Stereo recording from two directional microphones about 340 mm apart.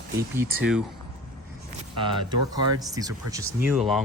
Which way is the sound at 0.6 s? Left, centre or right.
Centre.